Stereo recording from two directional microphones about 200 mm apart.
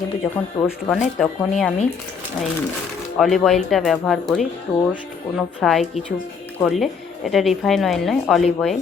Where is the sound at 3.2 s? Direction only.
Centre (ahead or behind).